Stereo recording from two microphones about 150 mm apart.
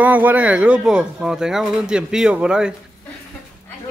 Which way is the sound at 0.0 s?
10° right (ahead or behind).